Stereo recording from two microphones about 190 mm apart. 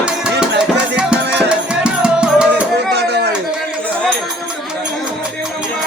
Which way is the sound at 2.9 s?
60° right (ahead or behind).